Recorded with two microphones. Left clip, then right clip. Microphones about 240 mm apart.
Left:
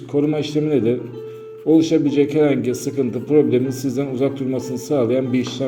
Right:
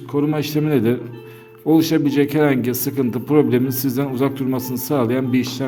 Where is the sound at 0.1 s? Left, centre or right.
Right.